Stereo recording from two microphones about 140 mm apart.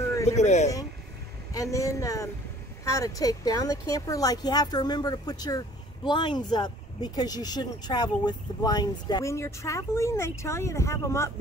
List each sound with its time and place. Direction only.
0.1 s a sound: 20° left (ahead or behind)
0.4 s speech: 55° left (ahead or behind)
1.5 s speech: 25° left (ahead or behind)